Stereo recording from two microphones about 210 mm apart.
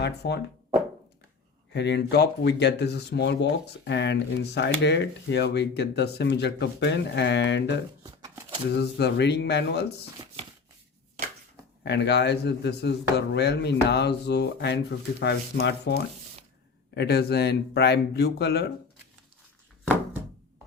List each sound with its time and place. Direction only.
0.0 s speech: 55° left (ahead or behind)
1.7 s speech: 55° left (ahead or behind)
8.0 s a sound: 15° right (ahead or behind)
8.7 s speech: 55° left (ahead or behind)
11.8 s speech: 55° left (ahead or behind)